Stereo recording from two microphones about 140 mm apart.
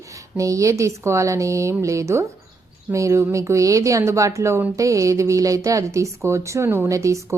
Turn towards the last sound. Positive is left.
turn(degrees=-20)  # may be behind; listen again after turning